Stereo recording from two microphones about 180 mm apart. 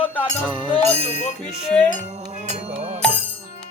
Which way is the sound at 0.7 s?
40° left (ahead or behind).